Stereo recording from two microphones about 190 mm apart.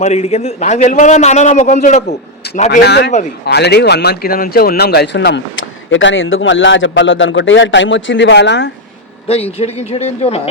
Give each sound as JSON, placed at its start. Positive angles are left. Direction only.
{"t": 0.0, "sound": "a man's voice", "side_deg": 35}
{"t": 2.6, "sound": "speech", "side_deg": 60}
{"t": 3.1, "sound": "a man's voice", "side_deg": 40}
{"t": 3.4, "sound": "a man's voice", "side_deg": 60}
{"t": 9.2, "sound": "a man's voice", "side_deg": 30}